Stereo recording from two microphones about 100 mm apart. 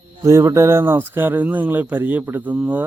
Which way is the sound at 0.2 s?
30° right (ahead or behind).